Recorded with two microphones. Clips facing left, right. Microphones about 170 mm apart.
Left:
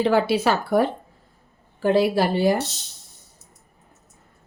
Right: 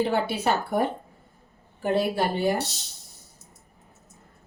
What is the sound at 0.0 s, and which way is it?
Speech, 90° left.